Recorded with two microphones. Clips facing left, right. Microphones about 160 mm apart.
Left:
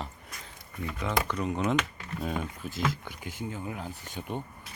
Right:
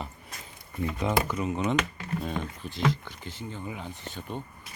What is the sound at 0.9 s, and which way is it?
Speech, 20° right (ahead or behind).